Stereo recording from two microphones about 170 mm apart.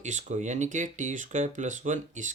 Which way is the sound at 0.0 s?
45° right (ahead or behind).